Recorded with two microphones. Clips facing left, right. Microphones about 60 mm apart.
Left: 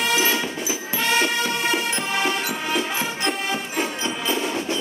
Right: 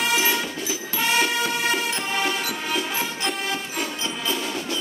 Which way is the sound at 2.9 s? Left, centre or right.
Centre.